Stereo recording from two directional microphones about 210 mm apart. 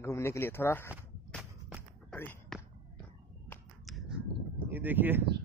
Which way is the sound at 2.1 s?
5° left (ahead or behind).